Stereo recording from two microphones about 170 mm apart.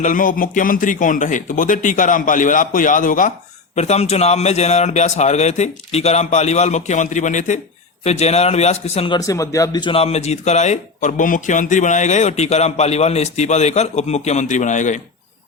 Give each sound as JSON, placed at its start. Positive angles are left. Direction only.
{"t": 0.0, "sound": "speech", "side_deg": 50}
{"t": 3.8, "sound": "a man's voice", "side_deg": 40}